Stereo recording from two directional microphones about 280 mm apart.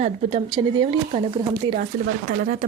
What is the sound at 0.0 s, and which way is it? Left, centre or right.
Speech, centre.